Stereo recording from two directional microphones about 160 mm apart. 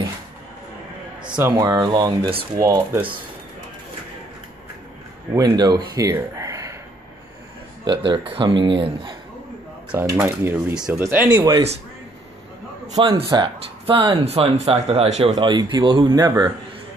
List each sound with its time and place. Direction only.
1.6 s speech: 25° right (ahead or behind)
5.3 s speech: 20° right (ahead or behind)
7.8 s speech: 30° right (ahead or behind)
9.9 s speech: 15° right (ahead or behind)
11.2 s speech: 25° right (ahead or behind)
12.9 s speech: 30° right (ahead or behind)
15.3 s speech: 30° right (ahead or behind)